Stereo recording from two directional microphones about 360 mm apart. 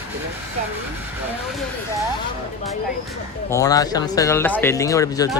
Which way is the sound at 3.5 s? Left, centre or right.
Centre.